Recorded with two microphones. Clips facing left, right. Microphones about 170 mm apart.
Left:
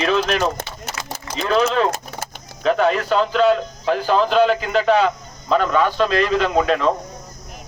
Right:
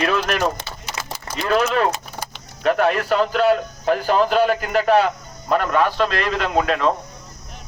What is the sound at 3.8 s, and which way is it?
Speech, 50° right (ahead or behind).